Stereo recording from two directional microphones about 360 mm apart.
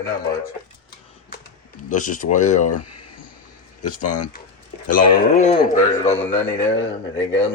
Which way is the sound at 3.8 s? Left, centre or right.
Left.